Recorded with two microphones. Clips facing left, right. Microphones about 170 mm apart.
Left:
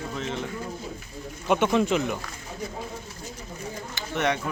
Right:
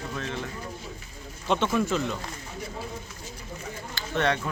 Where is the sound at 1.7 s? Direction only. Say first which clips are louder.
Left 3 dB; 20° left (ahead or behind).